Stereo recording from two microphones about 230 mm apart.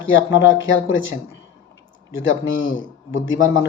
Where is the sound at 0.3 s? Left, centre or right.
Left.